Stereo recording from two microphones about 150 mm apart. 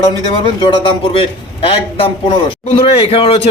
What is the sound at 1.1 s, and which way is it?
A man's voice, 40° left (ahead or behind).